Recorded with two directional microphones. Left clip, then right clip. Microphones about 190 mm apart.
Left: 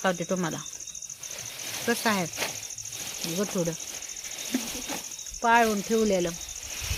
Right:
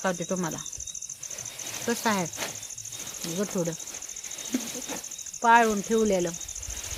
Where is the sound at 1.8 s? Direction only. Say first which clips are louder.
Left 1 dB; 5° left (ahead or behind).